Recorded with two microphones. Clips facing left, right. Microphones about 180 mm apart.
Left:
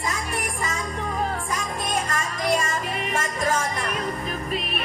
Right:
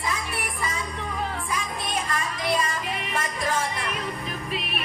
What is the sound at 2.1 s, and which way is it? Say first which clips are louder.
Music: left 1 dB; 45° left (ahead or behind).